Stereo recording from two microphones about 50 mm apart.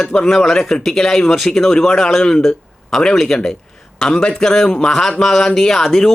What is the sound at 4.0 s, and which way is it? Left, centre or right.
Speech, centre.